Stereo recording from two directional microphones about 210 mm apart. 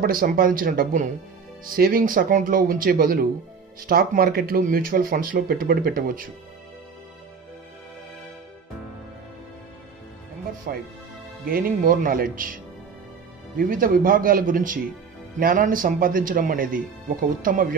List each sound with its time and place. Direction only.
0.0 s speech: 45° right (ahead or behind)
10.7 s speech: 45° right (ahead or behind)
13.6 s speech: 40° right (ahead or behind)